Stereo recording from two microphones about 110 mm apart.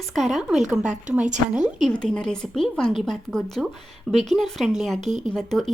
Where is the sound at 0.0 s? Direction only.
Centre (ahead or behind).